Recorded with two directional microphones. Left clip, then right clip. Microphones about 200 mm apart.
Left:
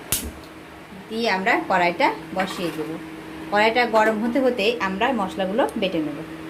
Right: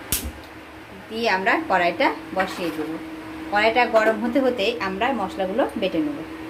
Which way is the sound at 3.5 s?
15° left (ahead or behind).